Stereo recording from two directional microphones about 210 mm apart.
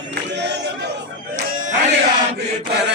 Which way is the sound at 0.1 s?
55° right (ahead or behind).